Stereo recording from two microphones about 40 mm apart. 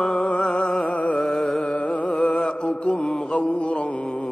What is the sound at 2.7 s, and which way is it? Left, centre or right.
Mantra, left.